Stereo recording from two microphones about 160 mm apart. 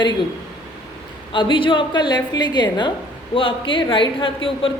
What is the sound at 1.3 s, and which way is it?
A woman's voice, 30° left (ahead or behind).